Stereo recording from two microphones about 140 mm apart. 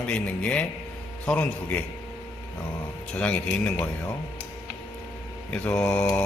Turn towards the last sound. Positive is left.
turn(degrees=10)  # may be behind; listen again after turning